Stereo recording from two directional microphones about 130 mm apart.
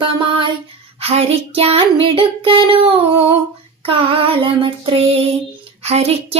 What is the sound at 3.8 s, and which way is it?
Child singing, 45° right (ahead or behind).